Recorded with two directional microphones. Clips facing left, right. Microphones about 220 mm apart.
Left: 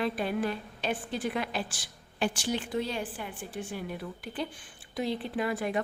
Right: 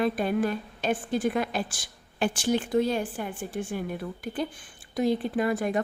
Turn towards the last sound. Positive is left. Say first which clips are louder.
# right 4 dB
turn(degrees=-45)  # may be behind; listen again after turning